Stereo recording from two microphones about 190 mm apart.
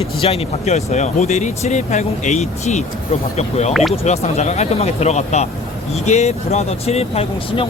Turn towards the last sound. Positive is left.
turn(degrees=30)  # may be behind; listen again after turning